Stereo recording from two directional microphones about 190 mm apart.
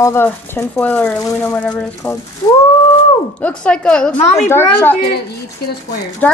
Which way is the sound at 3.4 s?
5° left (ahead or behind).